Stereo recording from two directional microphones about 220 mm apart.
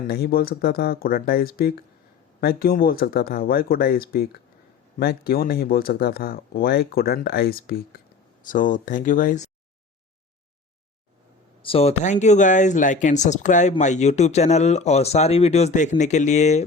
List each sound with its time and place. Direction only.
0.1 s speech: 45° left (ahead or behind)
11.6 s speech: 25° left (ahead or behind)